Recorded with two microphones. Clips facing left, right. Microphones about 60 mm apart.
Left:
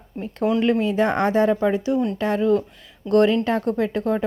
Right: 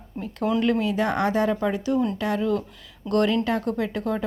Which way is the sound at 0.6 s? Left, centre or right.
Left.